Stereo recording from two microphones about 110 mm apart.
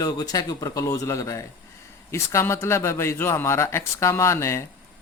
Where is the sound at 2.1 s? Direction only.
25° left (ahead or behind).